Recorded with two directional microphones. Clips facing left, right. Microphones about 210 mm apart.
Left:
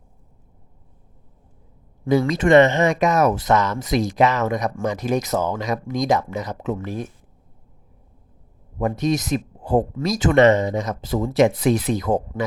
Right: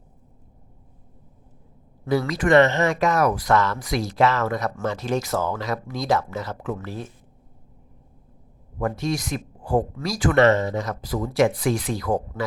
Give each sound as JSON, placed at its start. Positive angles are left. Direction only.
{"t": 2.0, "sound": "speech", "side_deg": 20}
{"t": 8.8, "sound": "speech", "side_deg": 20}